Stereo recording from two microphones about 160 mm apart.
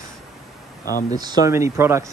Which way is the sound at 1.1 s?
25° right (ahead or behind).